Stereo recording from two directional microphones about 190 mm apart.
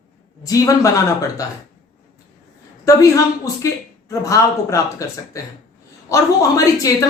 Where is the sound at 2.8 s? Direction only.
15° left (ahead or behind).